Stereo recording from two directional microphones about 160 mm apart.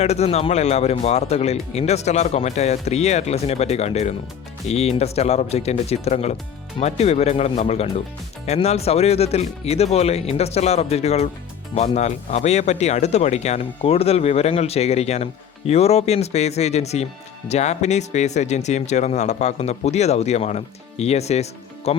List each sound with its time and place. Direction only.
0.0 s speech: 40° left (ahead or behind)